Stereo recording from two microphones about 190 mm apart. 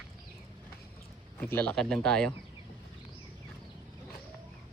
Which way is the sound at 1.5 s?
5° left (ahead or behind).